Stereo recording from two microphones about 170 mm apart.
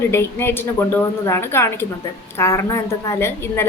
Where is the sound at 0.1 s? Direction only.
15° left (ahead or behind).